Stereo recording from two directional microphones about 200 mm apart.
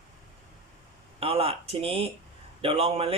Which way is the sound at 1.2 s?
30° right (ahead or behind).